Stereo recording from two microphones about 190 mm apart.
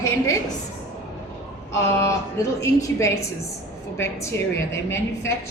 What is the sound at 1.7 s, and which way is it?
A woman's voice, 15° left (ahead or behind).